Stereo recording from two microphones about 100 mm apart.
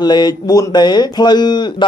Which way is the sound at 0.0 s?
45° left (ahead or behind).